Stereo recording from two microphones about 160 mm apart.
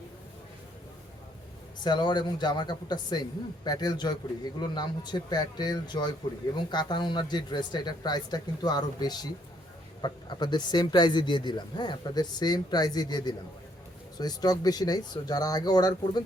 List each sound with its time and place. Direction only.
1.8 s speech: 30° left (ahead or behind)